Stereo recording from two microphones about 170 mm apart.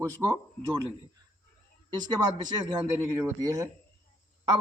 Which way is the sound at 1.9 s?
25° right (ahead or behind).